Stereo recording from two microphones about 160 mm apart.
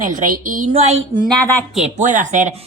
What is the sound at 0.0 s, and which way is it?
Speech, 55° right (ahead or behind).